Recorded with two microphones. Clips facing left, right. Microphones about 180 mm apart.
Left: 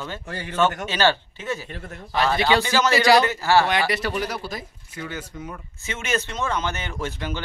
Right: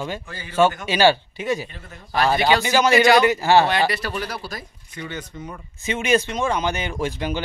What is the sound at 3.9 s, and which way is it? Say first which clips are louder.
Speech: left 2 dB; 20° left (ahead or behind).